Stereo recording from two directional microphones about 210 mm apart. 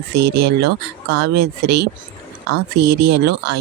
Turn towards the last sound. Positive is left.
turn(degrees=-50)  # may be behind; listen again after turning